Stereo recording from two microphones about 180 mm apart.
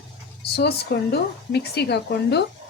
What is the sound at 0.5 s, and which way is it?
Speech, 65° left (ahead or behind).